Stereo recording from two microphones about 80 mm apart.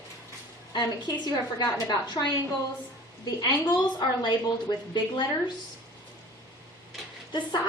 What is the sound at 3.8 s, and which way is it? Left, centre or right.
A woman's voice, left.